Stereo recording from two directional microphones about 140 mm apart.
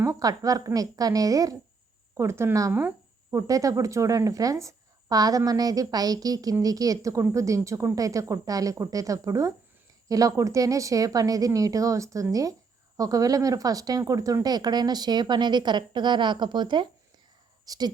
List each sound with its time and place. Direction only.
0.0 s a woman's voice: 25° right (ahead or behind)